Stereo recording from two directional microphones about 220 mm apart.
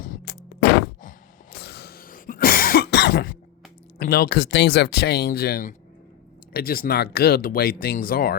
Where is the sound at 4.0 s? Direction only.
45° left (ahead or behind).